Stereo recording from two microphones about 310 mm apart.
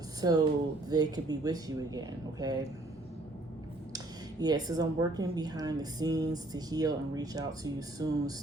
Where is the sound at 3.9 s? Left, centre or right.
Centre.